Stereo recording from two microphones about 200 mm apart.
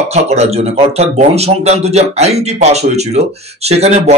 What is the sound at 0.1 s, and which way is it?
Speech, 35° right (ahead or behind).